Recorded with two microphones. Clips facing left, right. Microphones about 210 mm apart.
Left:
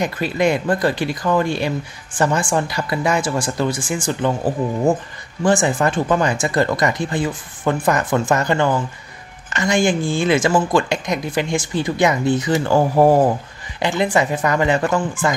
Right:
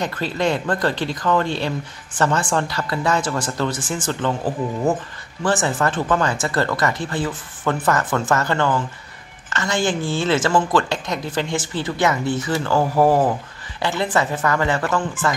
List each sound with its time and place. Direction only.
0.0 s speech: 10° left (ahead or behind)
5.4 s speech: 15° left (ahead or behind)